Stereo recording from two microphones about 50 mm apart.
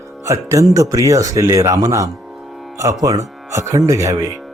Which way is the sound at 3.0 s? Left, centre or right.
Right.